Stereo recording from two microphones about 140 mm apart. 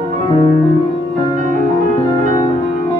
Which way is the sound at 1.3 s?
65° right (ahead or behind).